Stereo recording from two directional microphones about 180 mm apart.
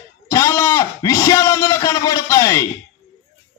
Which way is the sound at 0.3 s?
15° left (ahead or behind).